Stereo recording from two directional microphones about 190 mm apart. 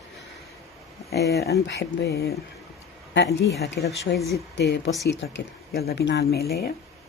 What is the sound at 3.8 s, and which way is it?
Speech, 55° left (ahead or behind).